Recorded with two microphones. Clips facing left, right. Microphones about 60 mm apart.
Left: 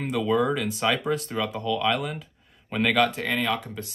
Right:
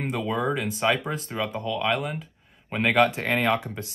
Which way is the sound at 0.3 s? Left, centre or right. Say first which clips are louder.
Left 4 dB; centre.